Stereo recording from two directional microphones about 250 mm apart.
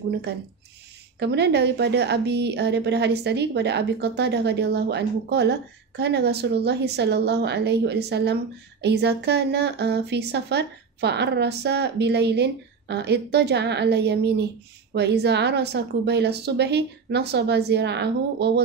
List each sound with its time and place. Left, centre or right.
1.2 s a woman's voice: right